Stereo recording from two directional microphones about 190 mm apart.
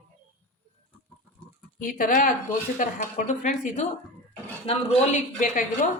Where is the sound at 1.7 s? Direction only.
45° left (ahead or behind).